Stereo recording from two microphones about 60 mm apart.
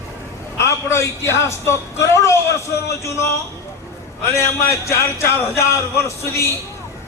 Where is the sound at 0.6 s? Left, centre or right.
Left.